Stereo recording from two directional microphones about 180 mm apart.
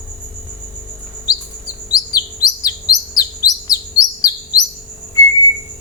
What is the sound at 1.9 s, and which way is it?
Chirp, 20° left (ahead or behind).